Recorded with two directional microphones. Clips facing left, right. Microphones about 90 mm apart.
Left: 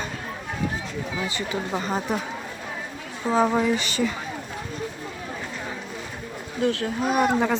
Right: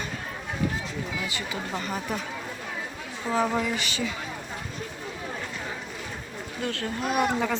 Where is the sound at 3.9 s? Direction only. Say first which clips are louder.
Left 6 dB; 45° left (ahead or behind).